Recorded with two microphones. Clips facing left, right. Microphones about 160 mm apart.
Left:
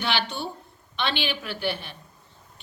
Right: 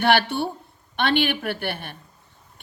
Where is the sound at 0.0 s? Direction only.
55° right (ahead or behind).